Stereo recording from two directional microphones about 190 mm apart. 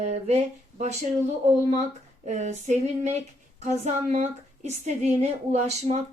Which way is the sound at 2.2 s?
40° right (ahead or behind).